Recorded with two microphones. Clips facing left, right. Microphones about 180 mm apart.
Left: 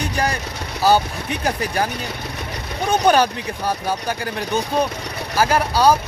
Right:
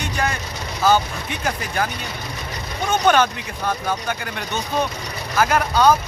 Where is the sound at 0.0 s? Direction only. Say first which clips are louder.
Left 2 dB; 35° left (ahead or behind).